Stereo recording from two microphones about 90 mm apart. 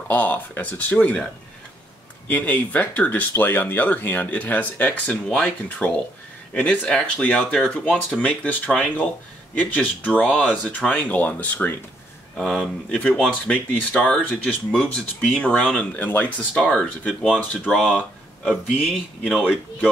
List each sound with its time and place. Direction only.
0.1 s speech: 20° left (ahead or behind)
2.2 s speech: 20° left (ahead or behind)
12.4 s speech: 5° left (ahead or behind)